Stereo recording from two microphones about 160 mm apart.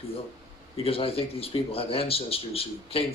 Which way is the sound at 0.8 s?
35° left (ahead or behind).